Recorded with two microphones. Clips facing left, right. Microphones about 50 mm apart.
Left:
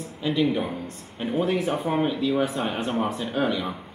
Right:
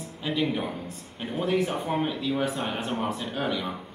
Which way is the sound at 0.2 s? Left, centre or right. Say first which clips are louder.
Left 4 dB; centre.